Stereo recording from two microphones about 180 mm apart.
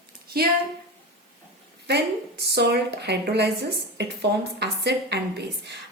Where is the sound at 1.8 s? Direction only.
65° right (ahead or behind).